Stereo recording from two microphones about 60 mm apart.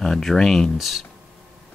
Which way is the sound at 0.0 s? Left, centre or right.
Centre.